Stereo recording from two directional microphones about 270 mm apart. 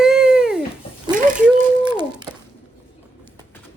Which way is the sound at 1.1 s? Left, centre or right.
Right.